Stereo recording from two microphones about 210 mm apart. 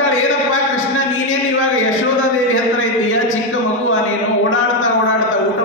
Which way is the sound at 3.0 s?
70° left (ahead or behind).